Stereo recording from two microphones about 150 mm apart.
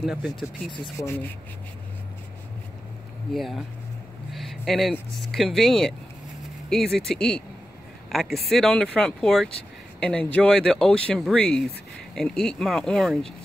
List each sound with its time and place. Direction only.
0.0 s speech: 5° right (ahead or behind)
0.3 s speech: 25° left (ahead or behind)
1.0 s speech: 15° left (ahead or behind)
3.3 s speech: centre (ahead or behind)
4.3 s a sound: centre (ahead or behind)
5.3 s speech: centre (ahead or behind)